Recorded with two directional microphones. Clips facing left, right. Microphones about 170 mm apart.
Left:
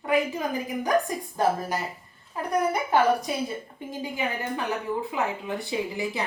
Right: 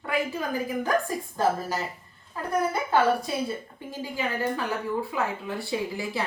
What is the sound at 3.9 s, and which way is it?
Speech, 20° left (ahead or behind).